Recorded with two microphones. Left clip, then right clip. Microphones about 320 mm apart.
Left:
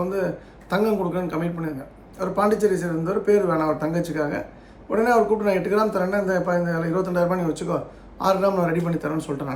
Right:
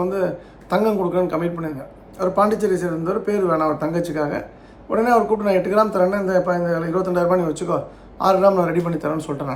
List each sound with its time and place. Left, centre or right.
0.0 s a man's voice: centre